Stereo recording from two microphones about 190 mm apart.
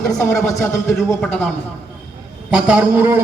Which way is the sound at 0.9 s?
Centre (ahead or behind).